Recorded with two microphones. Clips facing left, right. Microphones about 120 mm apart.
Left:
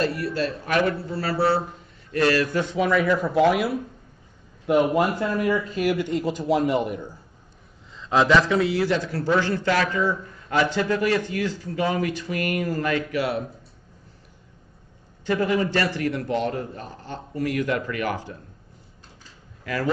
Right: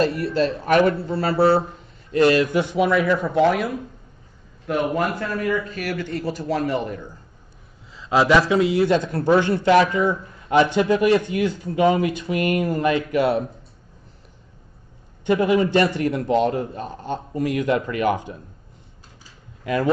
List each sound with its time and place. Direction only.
0.0 s speech: 25° right (ahead or behind); by 3.7 s 5° left (ahead or behind)
4.6 s speech: 20° left (ahead or behind)
7.9 s speech: 5° right (ahead or behind); by 13.2 s 20° right (ahead or behind)
15.2 s speech: 20° right (ahead or behind)
19.6 s a man's voice: 20° right (ahead or behind)